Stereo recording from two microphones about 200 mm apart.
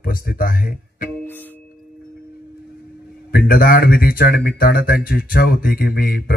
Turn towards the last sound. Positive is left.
turn(degrees=50)  # may be behind; listen again after turning